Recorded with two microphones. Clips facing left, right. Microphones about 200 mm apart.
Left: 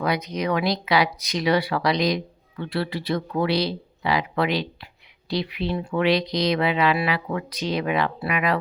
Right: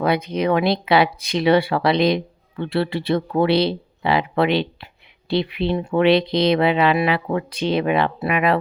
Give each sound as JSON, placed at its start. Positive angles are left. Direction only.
{"t": 0.0, "sound": "speech", "side_deg": -30}